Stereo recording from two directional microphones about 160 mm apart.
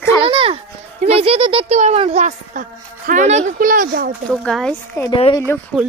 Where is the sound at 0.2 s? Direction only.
35° right (ahead or behind).